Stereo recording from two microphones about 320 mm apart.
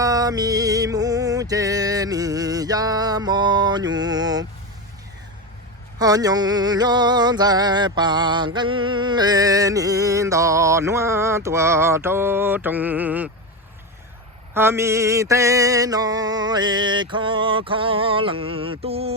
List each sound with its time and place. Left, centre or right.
0.0 s music: centre
6.0 s music: centre
14.5 s music: centre